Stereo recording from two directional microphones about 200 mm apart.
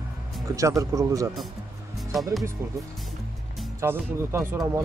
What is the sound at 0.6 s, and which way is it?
Speech, 15° right (ahead or behind).